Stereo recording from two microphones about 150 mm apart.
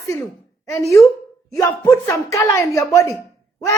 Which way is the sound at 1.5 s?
25° left (ahead or behind).